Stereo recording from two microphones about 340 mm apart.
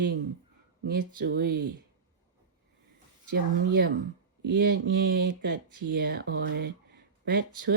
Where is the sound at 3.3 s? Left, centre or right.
Right.